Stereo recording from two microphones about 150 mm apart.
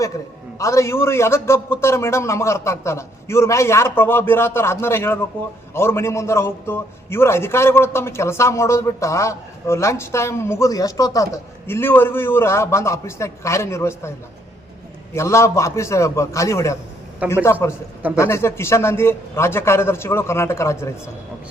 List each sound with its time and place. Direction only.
0.6 s a man's voice: 20° left (ahead or behind)
15.1 s a man's voice: 20° left (ahead or behind)